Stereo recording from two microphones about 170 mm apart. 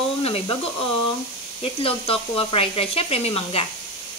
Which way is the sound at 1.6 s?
35° left (ahead or behind).